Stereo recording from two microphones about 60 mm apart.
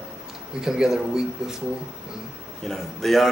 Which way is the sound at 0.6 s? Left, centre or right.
Centre.